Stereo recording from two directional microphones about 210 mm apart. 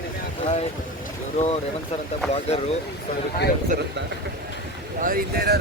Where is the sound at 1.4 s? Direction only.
30° left (ahead or behind).